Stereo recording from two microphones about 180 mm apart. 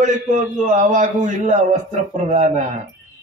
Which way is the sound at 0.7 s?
40° right (ahead or behind).